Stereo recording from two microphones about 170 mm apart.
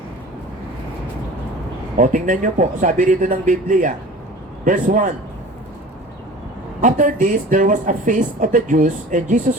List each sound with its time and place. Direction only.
2.0 s speech: 50° right (ahead or behind)
6.8 s speech: 50° right (ahead or behind)